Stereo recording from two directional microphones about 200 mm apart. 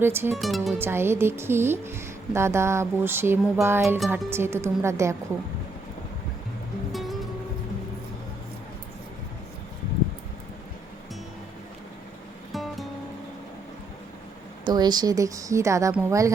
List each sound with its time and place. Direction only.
0.0 s speech: 10° right (ahead or behind)
0.4 s speech: centre (ahead or behind)
0.8 s speech: 10° right (ahead or behind)
6.9 s music: centre (ahead or behind)
14.6 s speech: 20° right (ahead or behind)